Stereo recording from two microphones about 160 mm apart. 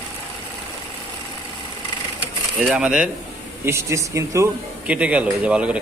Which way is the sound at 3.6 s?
15° right (ahead or behind).